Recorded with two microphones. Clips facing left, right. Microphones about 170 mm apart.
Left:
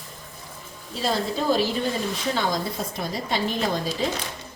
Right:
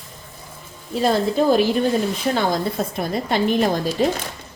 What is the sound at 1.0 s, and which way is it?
A woman's voice, 55° right (ahead or behind).